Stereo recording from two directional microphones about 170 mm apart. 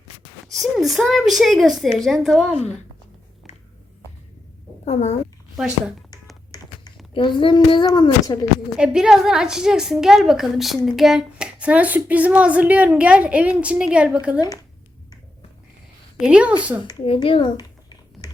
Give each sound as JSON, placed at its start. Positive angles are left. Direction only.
{"t": 0.4, "sound": "a woman's voice", "side_deg": 0}
{"t": 4.9, "sound": "a child's voice", "side_deg": 40}
{"t": 5.5, "sound": "a woman's voice", "side_deg": -5}
{"t": 6.5, "sound": "speech", "side_deg": 25}
{"t": 8.8, "sound": "a woman's voice", "side_deg": -5}
{"t": 16.2, "sound": "a woman's voice", "side_deg": -5}
{"t": 16.8, "sound": "a sound", "side_deg": 25}